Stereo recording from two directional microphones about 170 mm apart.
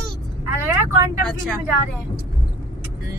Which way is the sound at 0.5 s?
15° right (ahead or behind).